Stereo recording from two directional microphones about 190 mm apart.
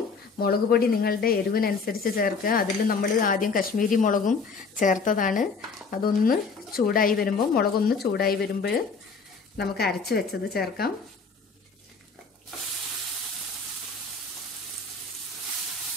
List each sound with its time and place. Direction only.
0.4 s a woman's voice: 55° left (ahead or behind)